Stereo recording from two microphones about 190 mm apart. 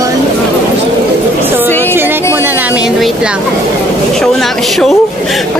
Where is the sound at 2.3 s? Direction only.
10° right (ahead or behind).